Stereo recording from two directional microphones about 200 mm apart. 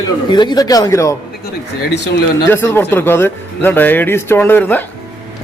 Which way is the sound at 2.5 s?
10° left (ahead or behind).